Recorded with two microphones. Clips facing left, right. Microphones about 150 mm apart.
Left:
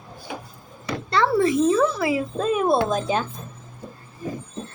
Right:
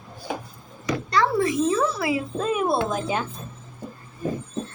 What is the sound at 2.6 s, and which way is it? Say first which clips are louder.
Speech: left 4 dB; 25° left (ahead or behind).